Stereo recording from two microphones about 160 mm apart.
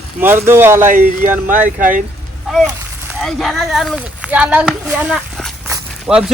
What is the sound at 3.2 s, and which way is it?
Speech, centre (ahead or behind).